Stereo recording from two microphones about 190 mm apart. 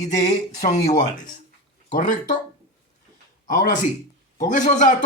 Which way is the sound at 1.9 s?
45° left (ahead or behind).